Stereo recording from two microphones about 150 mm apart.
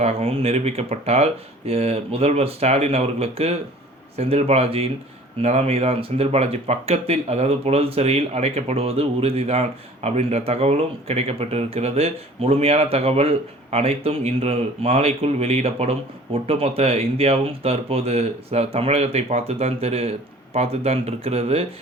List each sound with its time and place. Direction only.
0.0 s speech: 40° right (ahead or behind)